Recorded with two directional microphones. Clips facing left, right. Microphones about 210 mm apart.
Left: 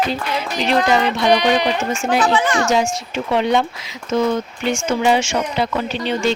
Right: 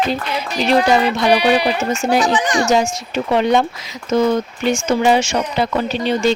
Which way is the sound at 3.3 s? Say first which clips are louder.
Right 2 dB; 45° right (ahead or behind).